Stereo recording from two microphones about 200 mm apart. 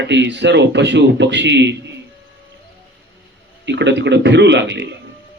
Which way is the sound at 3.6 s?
60° right (ahead or behind).